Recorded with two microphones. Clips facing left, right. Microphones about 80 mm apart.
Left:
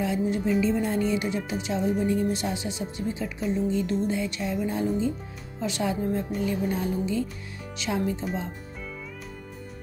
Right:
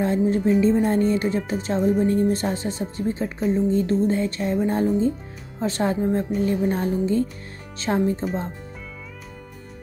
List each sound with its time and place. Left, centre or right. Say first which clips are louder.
0.0 s speech: right 5 dB; right